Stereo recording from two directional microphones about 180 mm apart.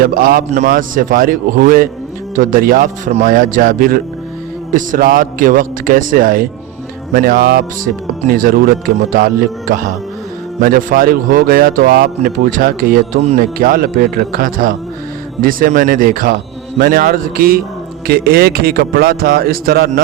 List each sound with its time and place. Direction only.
0.0 s speech: 50° right (ahead or behind)